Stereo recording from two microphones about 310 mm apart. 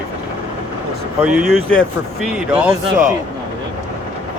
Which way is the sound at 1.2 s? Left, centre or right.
Centre.